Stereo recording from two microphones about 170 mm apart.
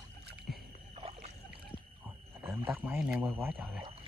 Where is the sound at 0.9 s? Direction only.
35° right (ahead or behind).